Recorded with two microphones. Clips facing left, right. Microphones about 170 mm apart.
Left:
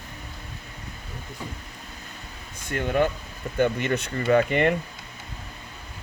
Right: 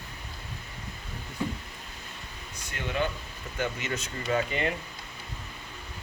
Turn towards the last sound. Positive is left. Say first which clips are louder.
# left 8 dB
turn(degrees=60)  # may be behind; listen again after turning